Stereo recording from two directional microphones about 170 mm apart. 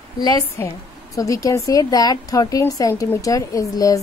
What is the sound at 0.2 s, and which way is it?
A woman's voice, 20° left (ahead or behind).